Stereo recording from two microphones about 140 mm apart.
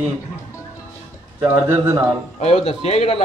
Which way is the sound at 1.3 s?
15° right (ahead or behind).